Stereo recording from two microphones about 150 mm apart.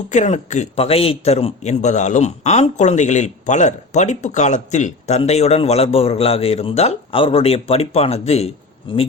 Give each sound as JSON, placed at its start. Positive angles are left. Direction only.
{"t": 0.1, "sound": "a man's voice", "side_deg": 50}